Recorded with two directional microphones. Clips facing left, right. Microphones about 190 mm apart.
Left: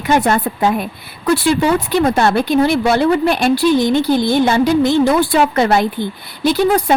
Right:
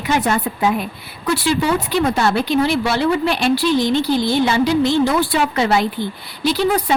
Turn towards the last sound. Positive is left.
turn(degrees=50)  # may be behind; listen again after turning